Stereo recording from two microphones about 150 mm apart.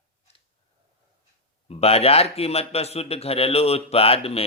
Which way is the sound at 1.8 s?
40° left (ahead or behind).